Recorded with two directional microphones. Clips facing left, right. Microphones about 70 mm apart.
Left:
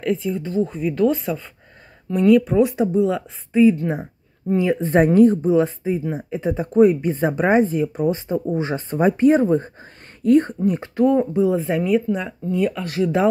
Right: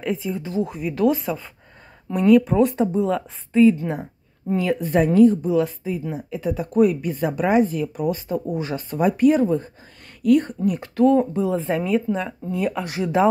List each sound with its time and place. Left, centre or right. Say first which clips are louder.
0.0 s speech: left 3 dB; centre
4.6 s speech: left 3 dB; left
11.0 s speech: even; left
11.6 s speech: left 2 dB; centre
12.8 s speech: left 4 dB; centre